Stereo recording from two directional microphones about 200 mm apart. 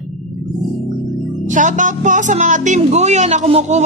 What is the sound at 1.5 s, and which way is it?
A woman's voice, 40° right (ahead or behind).